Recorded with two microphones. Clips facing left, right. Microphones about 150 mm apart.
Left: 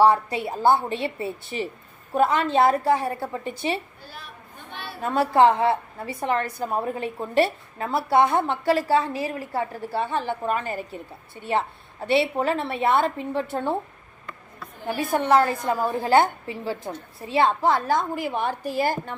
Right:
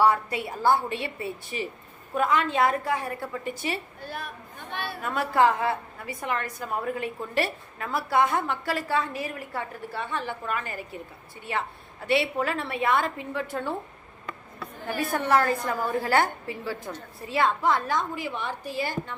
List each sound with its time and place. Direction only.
0.0 s a woman's voice: 30° left (ahead or behind)
4.0 s speech: 50° right (ahead or behind)
5.0 s a woman's voice: 30° left (ahead or behind)
12.0 s a woman's voice: 30° left (ahead or behind)
14.8 s a woman's voice: 20° left (ahead or behind); by 19.1 s 45° left (ahead or behind)